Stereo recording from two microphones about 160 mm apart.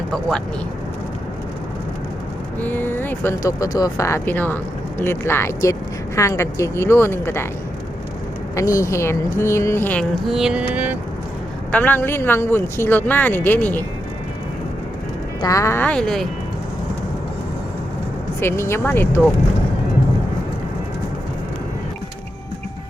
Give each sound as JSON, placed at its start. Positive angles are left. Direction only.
{"t": 0.1, "sound": "speech", "side_deg": 5}
{"t": 2.6, "sound": "speech", "side_deg": 10}
{"t": 8.5, "sound": "speech", "side_deg": 20}
{"t": 11.7, "sound": "speech", "side_deg": 10}
{"t": 15.4, "sound": "speech", "side_deg": 20}
{"t": 18.3, "sound": "speech", "side_deg": 15}